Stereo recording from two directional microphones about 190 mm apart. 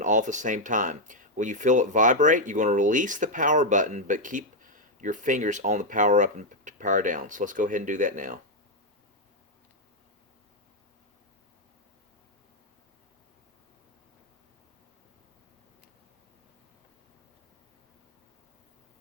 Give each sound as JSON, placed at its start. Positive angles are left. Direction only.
{"t": 0.0, "sound": "speech", "side_deg": -40}